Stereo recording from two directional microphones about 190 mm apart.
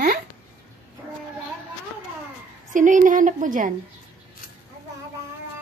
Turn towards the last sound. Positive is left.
turn(degrees=-45)  # may be behind; listen again after turning